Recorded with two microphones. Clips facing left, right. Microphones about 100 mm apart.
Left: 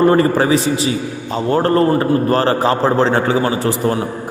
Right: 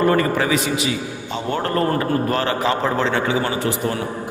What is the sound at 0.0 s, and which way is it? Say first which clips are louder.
A man's voice: left 5 dB; 30° left (ahead or behind).